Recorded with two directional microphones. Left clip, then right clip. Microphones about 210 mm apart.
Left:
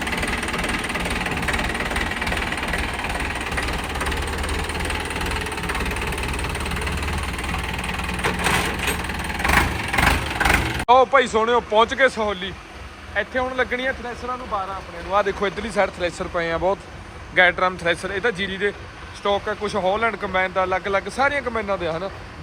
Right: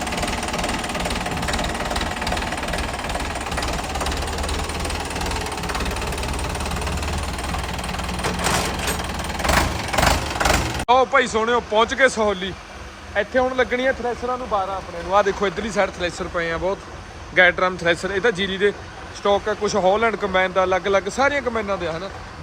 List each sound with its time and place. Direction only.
0.0 s engine: centre (ahead or behind)
7.5 s vehicle: centre (ahead or behind); by 12.5 s 20° right (ahead or behind)
13.1 s speech: 20° right (ahead or behind)
15.1 s speech: 15° right (ahead or behind)